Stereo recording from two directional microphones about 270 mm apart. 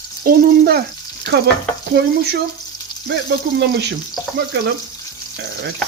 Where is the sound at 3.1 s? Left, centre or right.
Right.